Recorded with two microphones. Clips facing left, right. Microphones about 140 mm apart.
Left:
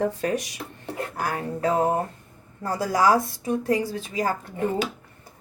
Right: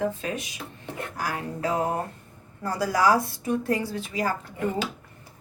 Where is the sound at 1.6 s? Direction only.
30° left (ahead or behind).